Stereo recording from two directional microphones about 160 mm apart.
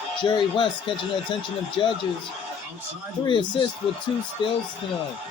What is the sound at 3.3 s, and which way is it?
Speech, 30° left (ahead or behind).